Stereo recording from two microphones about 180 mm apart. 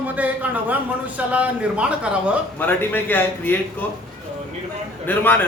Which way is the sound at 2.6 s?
10° left (ahead or behind).